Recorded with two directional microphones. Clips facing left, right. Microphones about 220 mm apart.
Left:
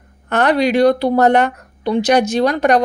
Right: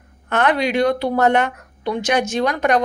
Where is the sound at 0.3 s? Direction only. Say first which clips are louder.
Left 4 dB; 35° left (ahead or behind).